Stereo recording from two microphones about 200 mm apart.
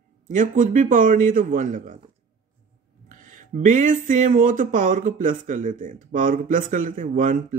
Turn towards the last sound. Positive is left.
turn(degrees=-40)  # may be behind; listen again after turning